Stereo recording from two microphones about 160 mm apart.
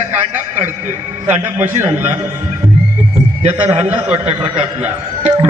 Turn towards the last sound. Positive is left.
turn(degrees=-40)  # may be behind; listen again after turning